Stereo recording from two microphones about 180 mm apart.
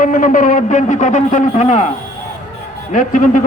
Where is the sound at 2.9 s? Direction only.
45° left (ahead or behind).